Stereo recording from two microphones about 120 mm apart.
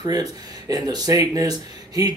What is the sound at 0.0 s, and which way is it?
Speech, 35° right (ahead or behind).